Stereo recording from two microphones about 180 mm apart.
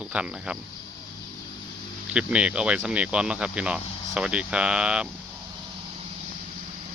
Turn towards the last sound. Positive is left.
turn(degrees=-5)  # may be behind; listen again after turning